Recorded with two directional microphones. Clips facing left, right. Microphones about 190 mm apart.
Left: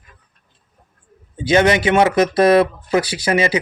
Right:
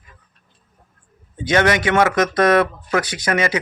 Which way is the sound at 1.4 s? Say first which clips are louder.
Left 3 dB; 30° left (ahead or behind).